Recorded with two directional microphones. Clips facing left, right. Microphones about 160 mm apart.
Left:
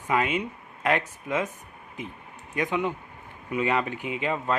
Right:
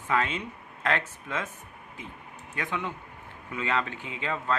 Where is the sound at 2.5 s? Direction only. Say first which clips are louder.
Left 6 dB; 15° left (ahead or behind).